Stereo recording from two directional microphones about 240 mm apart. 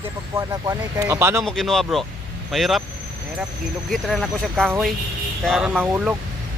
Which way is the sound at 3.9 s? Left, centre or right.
Centre.